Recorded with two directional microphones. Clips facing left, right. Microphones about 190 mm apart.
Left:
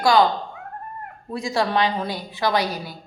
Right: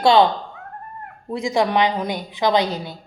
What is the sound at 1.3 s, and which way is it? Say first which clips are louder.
Speech: right 3 dB; 20° right (ahead or behind).